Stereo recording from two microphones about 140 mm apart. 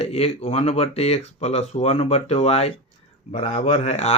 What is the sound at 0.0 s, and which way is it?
Speech, 45° left (ahead or behind).